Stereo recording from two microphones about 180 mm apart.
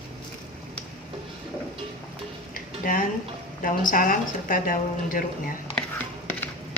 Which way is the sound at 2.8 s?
50° left (ahead or behind).